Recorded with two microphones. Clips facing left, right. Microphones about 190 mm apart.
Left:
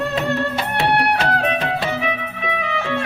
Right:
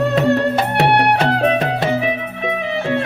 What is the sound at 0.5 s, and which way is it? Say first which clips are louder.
Music: right 4 dB; 55° right (ahead or behind).